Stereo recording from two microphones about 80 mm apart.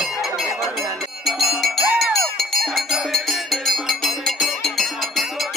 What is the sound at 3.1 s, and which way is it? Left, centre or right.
Music, centre.